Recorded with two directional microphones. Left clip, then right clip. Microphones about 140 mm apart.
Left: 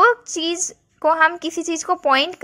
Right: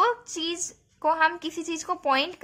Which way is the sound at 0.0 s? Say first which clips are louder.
Left 9 dB; 40° left (ahead or behind).